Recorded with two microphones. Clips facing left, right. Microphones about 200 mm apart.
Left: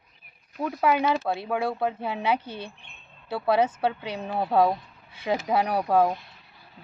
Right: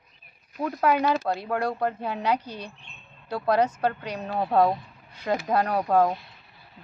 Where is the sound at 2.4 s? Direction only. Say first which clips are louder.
Left 1 dB; 25° left (ahead or behind).